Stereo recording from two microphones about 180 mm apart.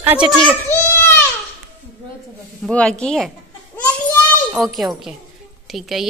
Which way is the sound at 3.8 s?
5° left (ahead or behind).